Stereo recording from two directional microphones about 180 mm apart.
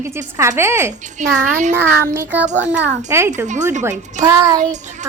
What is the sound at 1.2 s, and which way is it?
Music, 45° right (ahead or behind).